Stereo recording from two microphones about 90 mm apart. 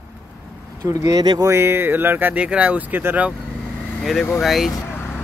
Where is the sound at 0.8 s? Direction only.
40° right (ahead or behind).